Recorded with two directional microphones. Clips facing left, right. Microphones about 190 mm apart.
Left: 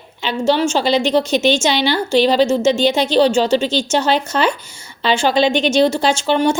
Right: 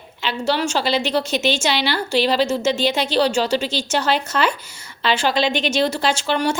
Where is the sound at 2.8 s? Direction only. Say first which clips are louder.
Left 5 dB; 5° right (ahead or behind).